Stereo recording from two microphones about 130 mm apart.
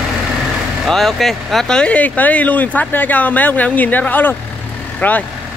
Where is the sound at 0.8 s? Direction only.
Centre (ahead or behind).